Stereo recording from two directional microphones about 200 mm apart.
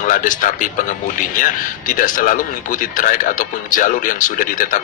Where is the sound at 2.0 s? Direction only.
40° left (ahead or behind).